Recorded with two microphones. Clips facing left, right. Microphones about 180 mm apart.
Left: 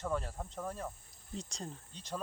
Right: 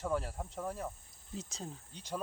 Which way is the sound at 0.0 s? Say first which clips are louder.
Right 1 dB; 10° right (ahead or behind).